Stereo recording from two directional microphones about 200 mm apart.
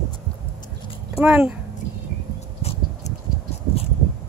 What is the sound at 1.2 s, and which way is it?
Speech, 5° right (ahead or behind).